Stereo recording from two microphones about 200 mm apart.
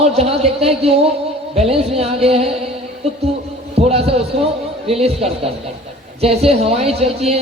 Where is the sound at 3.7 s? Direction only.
30° right (ahead or behind).